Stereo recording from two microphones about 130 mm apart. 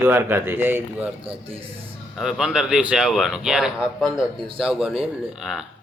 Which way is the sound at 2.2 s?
5° right (ahead or behind).